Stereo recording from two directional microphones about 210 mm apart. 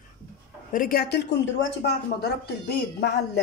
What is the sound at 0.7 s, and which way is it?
Speech, 45° left (ahead or behind).